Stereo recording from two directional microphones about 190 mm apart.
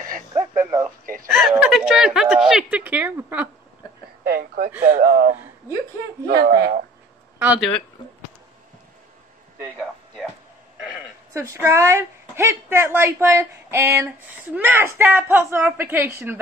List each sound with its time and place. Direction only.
0.7 s a woman's voice: 10° right (ahead or behind)
4.2 s a sound: 55° right (ahead or behind)
5.0 s speech: 55° right (ahead or behind)
7.3 s speech: 5° right (ahead or behind)
11.3 s speech: 15° right (ahead or behind)